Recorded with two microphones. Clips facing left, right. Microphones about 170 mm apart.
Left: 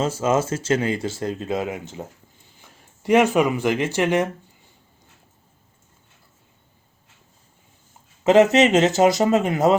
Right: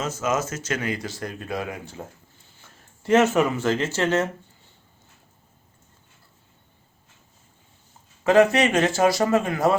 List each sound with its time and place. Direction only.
0.0 s speech: 30° left (ahead or behind); by 4.3 s 15° left (ahead or behind)
8.2 s speech: 20° left (ahead or behind)